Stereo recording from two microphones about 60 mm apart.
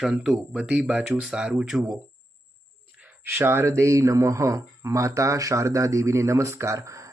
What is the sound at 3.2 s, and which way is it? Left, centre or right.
Speech, right.